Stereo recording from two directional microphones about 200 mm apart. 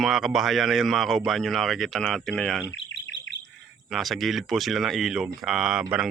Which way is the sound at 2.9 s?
70° left (ahead or behind).